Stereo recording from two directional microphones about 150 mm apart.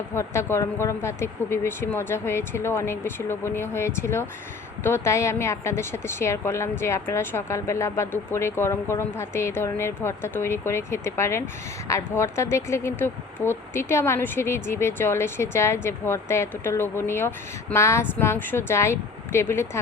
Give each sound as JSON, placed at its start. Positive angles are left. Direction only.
{"t": 0.1, "sound": "a woman's voice", "side_deg": 15}